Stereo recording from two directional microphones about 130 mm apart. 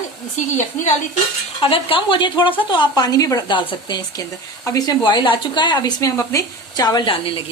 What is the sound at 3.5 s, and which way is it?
Speech, 40° left (ahead or behind).